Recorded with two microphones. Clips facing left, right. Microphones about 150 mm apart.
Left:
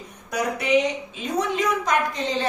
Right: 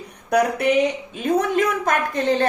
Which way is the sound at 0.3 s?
55° right (ahead or behind).